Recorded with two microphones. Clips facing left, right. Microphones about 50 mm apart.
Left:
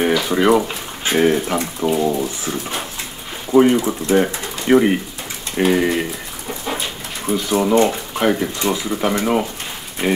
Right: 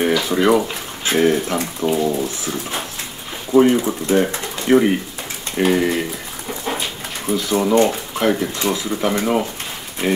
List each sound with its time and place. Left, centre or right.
0.0 s bathtub: centre
1.1 s speech: centre
3.7 s speech: centre
7.2 s speech: centre
8.5 s speech: left
8.9 s speech: centre